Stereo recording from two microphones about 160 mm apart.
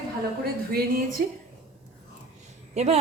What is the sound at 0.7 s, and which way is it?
Speech, 65° right (ahead or behind).